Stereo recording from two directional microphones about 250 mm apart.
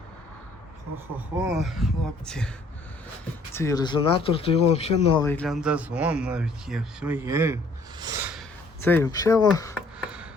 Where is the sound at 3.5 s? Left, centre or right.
Centre.